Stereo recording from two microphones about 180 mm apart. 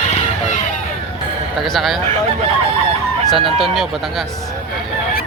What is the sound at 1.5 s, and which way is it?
Speech, centre (ahead or behind).